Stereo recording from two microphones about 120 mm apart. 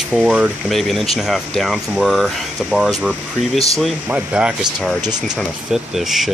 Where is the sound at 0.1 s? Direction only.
5° right (ahead or behind).